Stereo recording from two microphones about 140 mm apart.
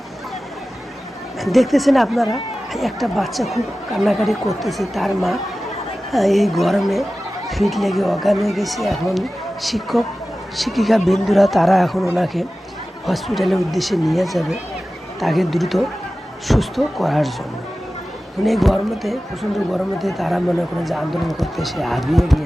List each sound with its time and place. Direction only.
1.4 s speech: centre (ahead or behind)
18.4 s speech: centre (ahead or behind)